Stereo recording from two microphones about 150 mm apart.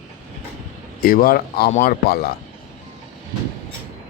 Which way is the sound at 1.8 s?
90° left.